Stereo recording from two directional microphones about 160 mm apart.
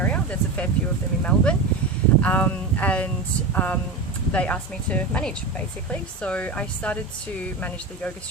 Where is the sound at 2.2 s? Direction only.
10° left (ahead or behind).